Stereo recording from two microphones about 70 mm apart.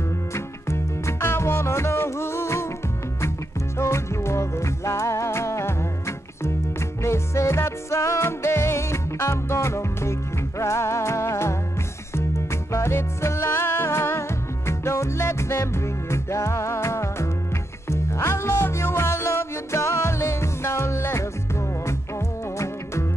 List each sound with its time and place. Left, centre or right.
0.3 s music: left
3.7 s music: left